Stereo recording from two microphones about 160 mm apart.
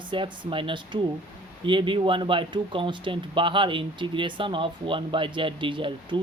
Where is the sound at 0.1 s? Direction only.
30° right (ahead or behind).